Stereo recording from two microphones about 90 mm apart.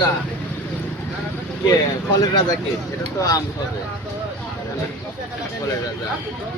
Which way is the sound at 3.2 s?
40° left (ahead or behind).